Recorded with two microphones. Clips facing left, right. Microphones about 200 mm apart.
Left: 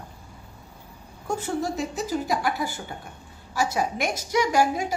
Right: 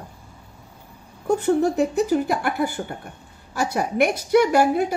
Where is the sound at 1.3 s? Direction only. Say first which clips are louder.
Right 8 dB; 60° right (ahead or behind).